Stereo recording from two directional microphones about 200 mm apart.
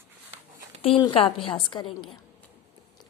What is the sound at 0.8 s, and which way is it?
A woman's voice, 25° left (ahead or behind).